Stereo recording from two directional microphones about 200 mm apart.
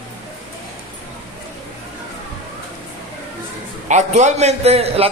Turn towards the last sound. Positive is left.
turn(degrees=-30)  # may be behind; listen again after turning